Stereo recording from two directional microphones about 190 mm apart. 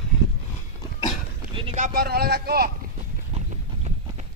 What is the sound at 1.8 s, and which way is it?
Speech, 45° right (ahead or behind).